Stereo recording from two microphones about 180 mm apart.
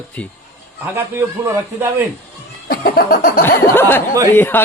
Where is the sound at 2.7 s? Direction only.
55° left (ahead or behind).